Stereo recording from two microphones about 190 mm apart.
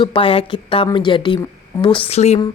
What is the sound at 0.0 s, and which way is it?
A woman's voice, 25° left (ahead or behind).